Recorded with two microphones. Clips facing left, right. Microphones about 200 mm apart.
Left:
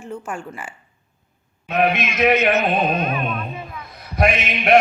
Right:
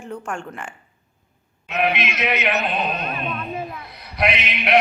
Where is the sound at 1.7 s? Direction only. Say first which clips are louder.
Left 3 dB; 50° left (ahead or behind).